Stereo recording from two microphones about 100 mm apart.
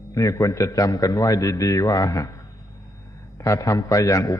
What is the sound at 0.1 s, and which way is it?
A man's voice, 35° left (ahead or behind).